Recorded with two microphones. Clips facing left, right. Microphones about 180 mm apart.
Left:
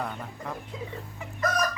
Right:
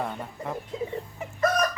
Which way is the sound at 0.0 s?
15° right (ahead or behind).